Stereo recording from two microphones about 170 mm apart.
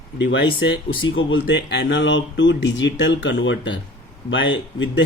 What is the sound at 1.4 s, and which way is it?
Speech, 90° left.